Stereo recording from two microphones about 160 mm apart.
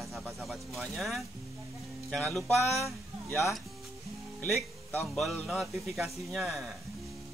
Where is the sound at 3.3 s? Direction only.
15° left (ahead or behind).